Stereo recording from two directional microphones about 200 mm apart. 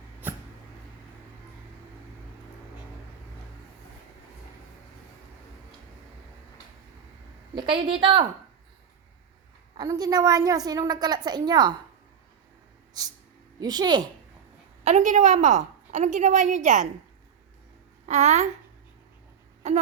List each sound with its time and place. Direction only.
7.5 s a woman's voice: 25° right (ahead or behind)
9.7 s a woman's voice: 20° right (ahead or behind)
13.6 s a woman's voice: 20° right (ahead or behind)
14.8 s a woman's voice: 35° right (ahead or behind)
18.0 s a woman's voice: 35° right (ahead or behind)
19.6 s a woman's voice: 35° right (ahead or behind)